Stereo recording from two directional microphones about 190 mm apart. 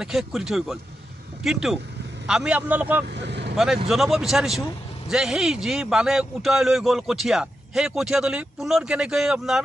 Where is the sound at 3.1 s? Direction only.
65° right (ahead or behind).